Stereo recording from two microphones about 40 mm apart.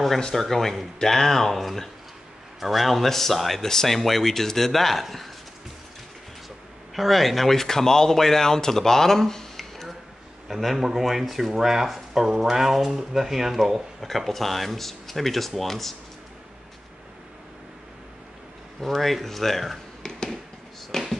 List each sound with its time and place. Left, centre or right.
0.3 s speech: centre
7.0 s speech: centre
10.5 s speech: centre
18.8 s speech: centre
20.0 s tap: centre
20.9 s a sound: centre